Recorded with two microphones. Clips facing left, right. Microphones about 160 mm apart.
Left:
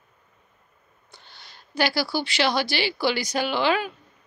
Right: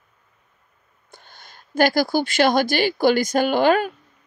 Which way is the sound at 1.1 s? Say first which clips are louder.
Right 4 dB; 50° right (ahead or behind).